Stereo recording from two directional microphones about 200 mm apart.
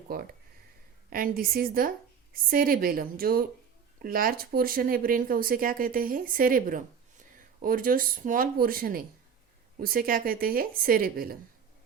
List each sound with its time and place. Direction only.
0.1 s speech: 45° right (ahead or behind)